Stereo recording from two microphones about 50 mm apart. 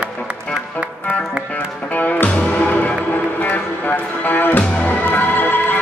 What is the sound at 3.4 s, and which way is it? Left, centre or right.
Music, left.